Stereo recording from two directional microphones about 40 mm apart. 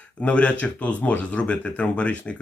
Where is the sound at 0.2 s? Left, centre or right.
Left.